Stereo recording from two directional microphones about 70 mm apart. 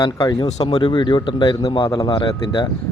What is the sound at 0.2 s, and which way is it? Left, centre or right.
Speech, left.